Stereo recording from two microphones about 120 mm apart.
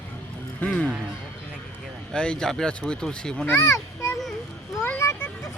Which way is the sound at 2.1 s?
5° left (ahead or behind).